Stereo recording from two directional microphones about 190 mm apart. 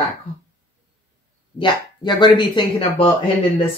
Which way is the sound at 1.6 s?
25° left (ahead or behind).